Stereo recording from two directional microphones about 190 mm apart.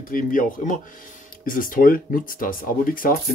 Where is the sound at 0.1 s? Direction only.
45° left (ahead or behind).